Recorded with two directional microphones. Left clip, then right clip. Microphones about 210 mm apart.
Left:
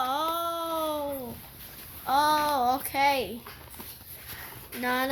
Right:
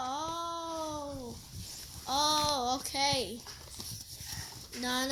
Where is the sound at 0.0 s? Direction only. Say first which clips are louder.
Left 8 dB; 25° left (ahead or behind).